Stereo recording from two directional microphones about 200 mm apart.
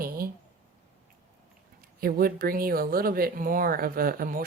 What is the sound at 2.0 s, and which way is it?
Speech, 45° right (ahead or behind).